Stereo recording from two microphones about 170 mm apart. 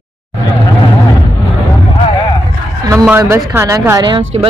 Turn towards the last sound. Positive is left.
turn(degrees=-15)  # may be behind; listen again after turning